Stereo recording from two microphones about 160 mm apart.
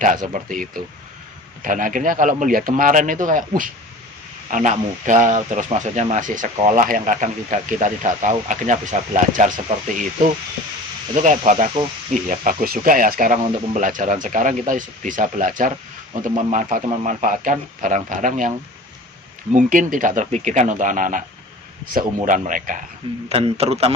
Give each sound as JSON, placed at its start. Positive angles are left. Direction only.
{"t": 0.0, "sound": "speech", "side_deg": -55}
{"t": 11.1, "sound": "speech", "side_deg": -50}
{"t": 22.3, "sound": "speech", "side_deg": -55}
{"t": 23.3, "sound": "speech", "side_deg": -40}